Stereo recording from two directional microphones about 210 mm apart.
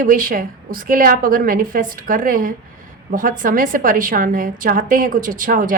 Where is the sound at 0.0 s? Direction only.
40° right (ahead or behind).